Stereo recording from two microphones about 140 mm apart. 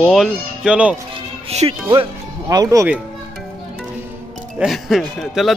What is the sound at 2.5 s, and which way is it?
Speech, 25° right (ahead or behind).